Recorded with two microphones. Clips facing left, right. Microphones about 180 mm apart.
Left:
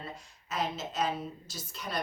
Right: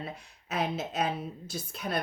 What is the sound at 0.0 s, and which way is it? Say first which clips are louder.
A woman's voice: right 3 dB; 60° right (ahead or behind).